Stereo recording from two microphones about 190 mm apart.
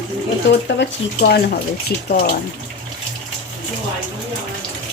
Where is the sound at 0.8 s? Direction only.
55° left (ahead or behind).